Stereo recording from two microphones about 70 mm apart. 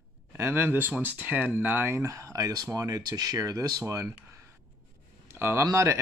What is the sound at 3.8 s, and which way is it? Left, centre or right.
Speech, right.